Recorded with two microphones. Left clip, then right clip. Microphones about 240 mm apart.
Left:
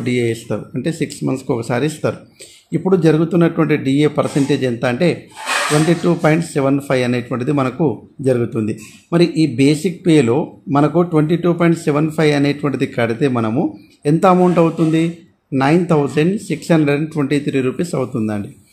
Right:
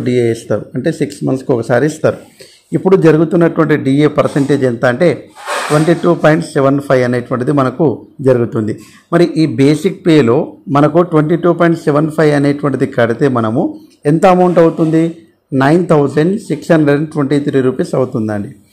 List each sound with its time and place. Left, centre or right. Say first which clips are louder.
0.1 s a man's voice: right 6 dB; centre
9.4 s speech: right 4 dB; right
10.1 s a man's voice: right 4 dB; centre